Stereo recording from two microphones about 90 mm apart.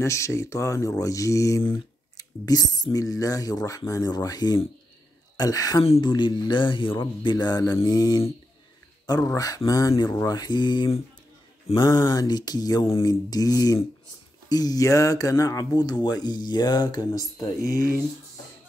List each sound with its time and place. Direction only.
0.0 s speech: 35° left (ahead or behind)